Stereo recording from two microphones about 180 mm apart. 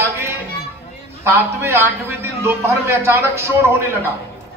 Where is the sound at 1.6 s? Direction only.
15° right (ahead or behind).